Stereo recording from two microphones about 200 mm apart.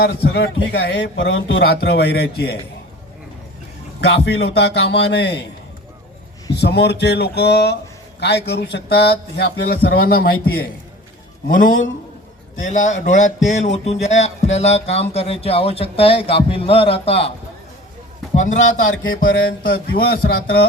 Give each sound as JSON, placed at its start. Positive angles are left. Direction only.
{"t": 0.0, "sound": "a man's voice", "side_deg": 55}
{"t": 4.0, "sound": "a man's voice", "side_deg": 55}
{"t": 6.6, "sound": "a man's voice", "side_deg": 55}
{"t": 18.3, "sound": "a man's voice", "side_deg": 35}
{"t": 19.0, "sound": "music", "side_deg": 75}
{"t": 19.6, "sound": "a man's voice", "side_deg": 50}